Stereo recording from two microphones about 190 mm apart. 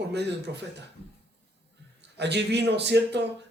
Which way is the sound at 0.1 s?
65° right (ahead or behind).